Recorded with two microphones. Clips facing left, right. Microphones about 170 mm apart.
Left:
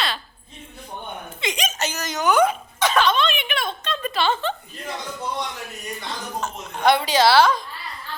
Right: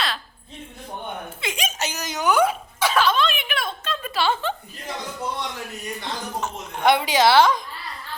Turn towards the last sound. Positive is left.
turn(degrees=-20)  # may be behind; listen again after turning